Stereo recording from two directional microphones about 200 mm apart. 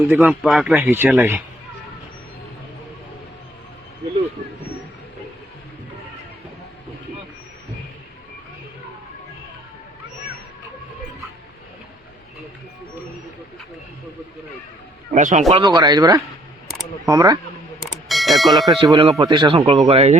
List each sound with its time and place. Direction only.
0.1 s a man's voice: 5° right (ahead or behind)
15.1 s speech: 40° right (ahead or behind); by 17.3 s 20° right (ahead or behind)
18.1 s mechanisms: centre (ahead or behind)
18.7 s speech: 25° right (ahead or behind)